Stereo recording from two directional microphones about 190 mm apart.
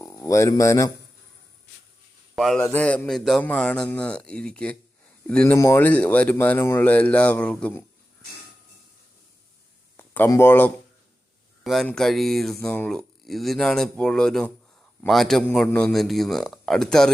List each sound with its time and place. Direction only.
0.3 s speech: 15° left (ahead or behind)
2.3 s a man's voice: centre (ahead or behind)
2.6 s speech: 10° left (ahead or behind)
10.0 s speech: 15° left (ahead or behind)
11.6 s speech: centre (ahead or behind)